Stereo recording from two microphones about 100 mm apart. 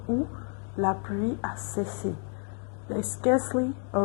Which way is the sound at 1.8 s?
15° left (ahead or behind).